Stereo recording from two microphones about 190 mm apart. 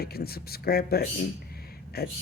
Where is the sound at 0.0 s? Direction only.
55° left (ahead or behind).